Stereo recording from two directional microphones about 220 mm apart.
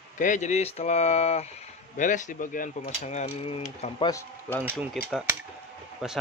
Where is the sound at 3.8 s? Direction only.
20° left (ahead or behind).